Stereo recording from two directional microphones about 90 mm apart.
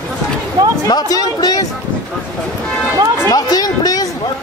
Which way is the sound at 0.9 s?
45° left (ahead or behind).